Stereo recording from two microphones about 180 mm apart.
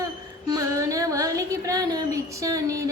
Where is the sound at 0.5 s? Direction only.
20° right (ahead or behind).